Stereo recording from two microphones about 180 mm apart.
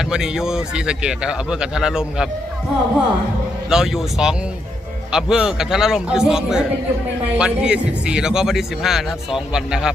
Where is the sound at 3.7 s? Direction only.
5° right (ahead or behind).